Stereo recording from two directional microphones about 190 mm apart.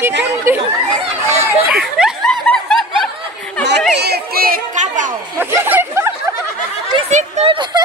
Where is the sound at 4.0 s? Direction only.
55° right (ahead or behind); by 5.1 s 40° right (ahead or behind).